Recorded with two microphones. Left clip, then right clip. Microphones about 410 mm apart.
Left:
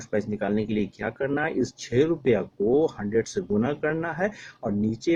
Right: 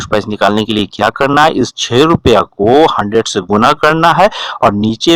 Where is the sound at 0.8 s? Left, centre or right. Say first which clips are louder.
Right 17 dB; right.